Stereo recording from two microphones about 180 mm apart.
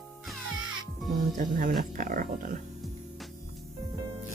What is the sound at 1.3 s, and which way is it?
Speech, 50° right (ahead or behind).